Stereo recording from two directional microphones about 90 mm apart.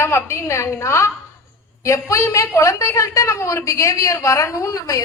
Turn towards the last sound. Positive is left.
turn(degrees=35)  # may be behind; listen again after turning